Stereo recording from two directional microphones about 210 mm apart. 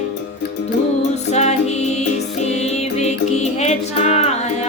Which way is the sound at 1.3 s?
30° left (ahead or behind).